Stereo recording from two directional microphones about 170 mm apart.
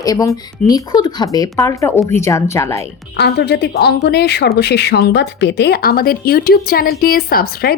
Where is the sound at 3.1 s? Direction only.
75° left (ahead or behind).